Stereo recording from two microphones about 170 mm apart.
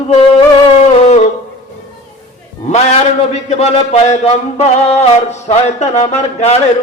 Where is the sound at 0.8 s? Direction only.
40° left (ahead or behind).